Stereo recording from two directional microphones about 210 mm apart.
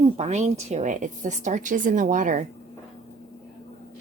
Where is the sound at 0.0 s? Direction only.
35° right (ahead or behind).